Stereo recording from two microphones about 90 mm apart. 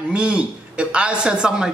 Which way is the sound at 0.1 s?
10° right (ahead or behind).